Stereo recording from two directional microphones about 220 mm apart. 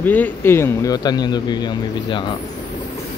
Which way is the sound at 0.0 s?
10° left (ahead or behind).